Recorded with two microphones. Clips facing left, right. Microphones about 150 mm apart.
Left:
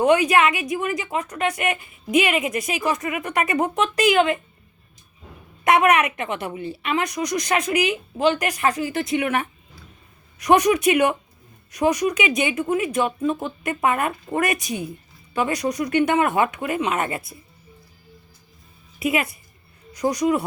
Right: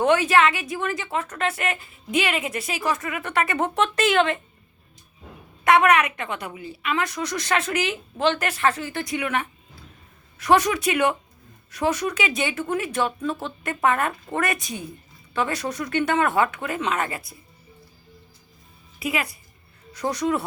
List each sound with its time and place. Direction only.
0.0 s a woman's voice: 15° left (ahead or behind)
5.6 s a woman's voice: 20° left (ahead or behind)
18.9 s a woman's voice: 20° left (ahead or behind)